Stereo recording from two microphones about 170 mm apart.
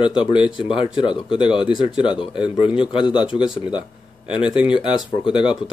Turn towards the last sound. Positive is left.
turn(degrees=30)  # may be behind; listen again after turning